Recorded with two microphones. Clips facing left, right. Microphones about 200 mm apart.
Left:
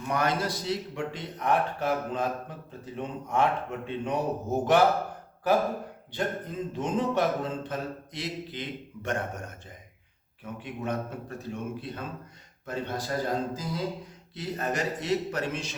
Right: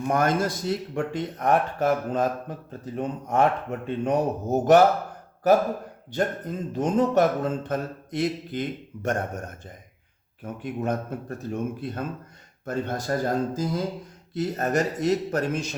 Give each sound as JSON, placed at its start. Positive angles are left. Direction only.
{"t": 0.0, "sound": "speech", "side_deg": -50}
{"t": 6.1, "sound": "speech", "side_deg": -45}